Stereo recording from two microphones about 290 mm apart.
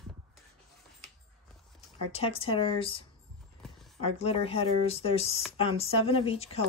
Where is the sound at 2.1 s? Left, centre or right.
Centre.